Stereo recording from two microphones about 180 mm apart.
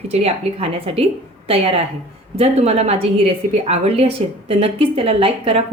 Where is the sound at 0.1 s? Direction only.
35° right (ahead or behind).